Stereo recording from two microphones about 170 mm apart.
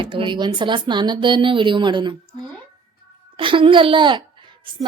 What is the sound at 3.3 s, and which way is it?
A child's voice, 30° right (ahead or behind).